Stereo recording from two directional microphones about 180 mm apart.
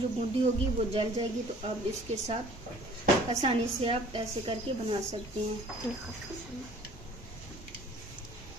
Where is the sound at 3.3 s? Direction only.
30° right (ahead or behind).